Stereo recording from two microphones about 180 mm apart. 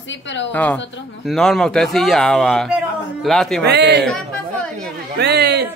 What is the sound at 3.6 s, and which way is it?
Speech, 70° right (ahead or behind).